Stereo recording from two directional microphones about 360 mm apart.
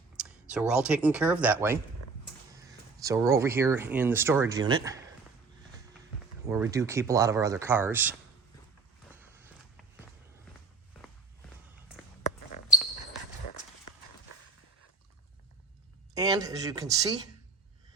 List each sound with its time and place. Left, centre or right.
0.2 s speech: centre
6.4 s speech: centre
9.1 s walk: centre
13.9 s run: left
16.1 s speech: centre